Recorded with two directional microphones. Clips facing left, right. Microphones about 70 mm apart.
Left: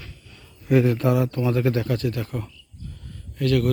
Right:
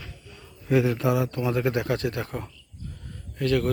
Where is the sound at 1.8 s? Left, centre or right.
Right.